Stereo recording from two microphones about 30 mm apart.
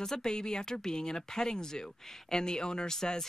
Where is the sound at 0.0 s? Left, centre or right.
Left.